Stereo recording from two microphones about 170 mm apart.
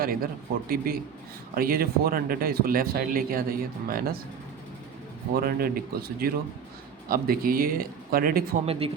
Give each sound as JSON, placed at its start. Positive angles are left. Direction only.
{"t": 0.0, "sound": "speech", "side_deg": -60}
{"t": 5.4, "sound": "speech", "side_deg": -60}
{"t": 8.6, "sound": "speech", "side_deg": -35}